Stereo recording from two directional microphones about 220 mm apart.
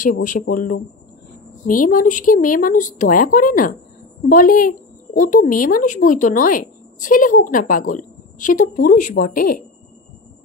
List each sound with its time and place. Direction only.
0.0 s a woman's voice: 35° left (ahead or behind)